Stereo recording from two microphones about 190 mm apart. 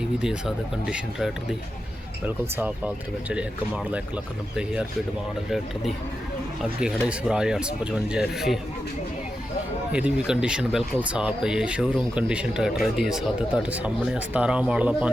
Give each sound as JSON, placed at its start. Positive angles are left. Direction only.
{"t": 0.2, "sound": "speech", "side_deg": -5}
{"t": 4.5, "sound": "speech", "side_deg": -5}
{"t": 7.1, "sound": "speech", "side_deg": -5}
{"t": 9.9, "sound": "speech", "side_deg": -5}